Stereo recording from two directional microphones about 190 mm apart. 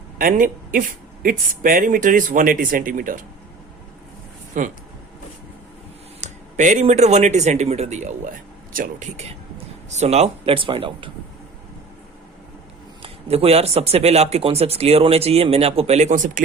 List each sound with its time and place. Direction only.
0.2 s speech: 45° right (ahead or behind)
4.6 s speech: 45° right (ahead or behind)
6.1 s speech: 40° right (ahead or behind)
13.0 s speech: 30° right (ahead or behind)